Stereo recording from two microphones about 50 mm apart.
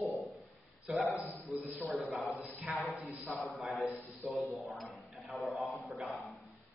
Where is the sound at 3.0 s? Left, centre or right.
Right.